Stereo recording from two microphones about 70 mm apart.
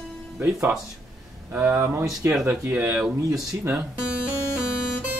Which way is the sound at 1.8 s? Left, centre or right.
Right.